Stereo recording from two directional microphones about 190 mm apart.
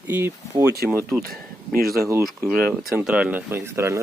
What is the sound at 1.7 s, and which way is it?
Speech, 50° right (ahead or behind).